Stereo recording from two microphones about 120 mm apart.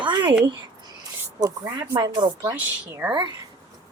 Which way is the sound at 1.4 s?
30° right (ahead or behind).